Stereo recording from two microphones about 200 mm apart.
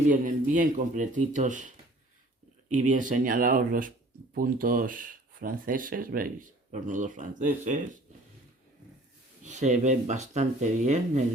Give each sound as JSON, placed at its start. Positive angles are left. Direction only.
{"t": 0.1, "sound": "speech", "side_deg": -40}
{"t": 2.6, "sound": "speech", "side_deg": -40}
{"t": 9.4, "sound": "speech", "side_deg": -35}